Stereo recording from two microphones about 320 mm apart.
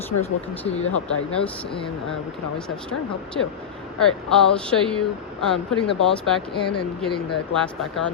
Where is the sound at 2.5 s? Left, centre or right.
Centre.